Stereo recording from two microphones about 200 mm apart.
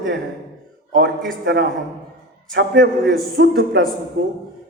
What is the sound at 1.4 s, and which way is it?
A man's voice, 55° right (ahead or behind).